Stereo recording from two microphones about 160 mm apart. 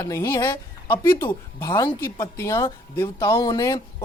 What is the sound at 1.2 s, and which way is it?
Speech, 15° left (ahead or behind).